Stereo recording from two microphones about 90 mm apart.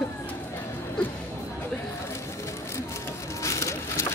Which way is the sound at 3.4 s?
35° left (ahead or behind).